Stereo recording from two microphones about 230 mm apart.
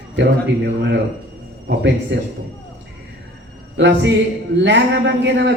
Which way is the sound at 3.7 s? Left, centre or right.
Right.